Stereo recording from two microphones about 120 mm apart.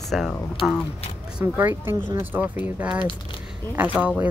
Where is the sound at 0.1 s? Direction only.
Centre (ahead or behind).